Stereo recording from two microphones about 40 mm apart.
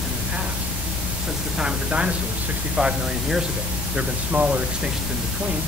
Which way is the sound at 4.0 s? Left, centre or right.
Right.